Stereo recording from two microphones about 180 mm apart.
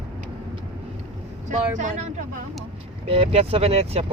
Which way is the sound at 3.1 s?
30° right (ahead or behind).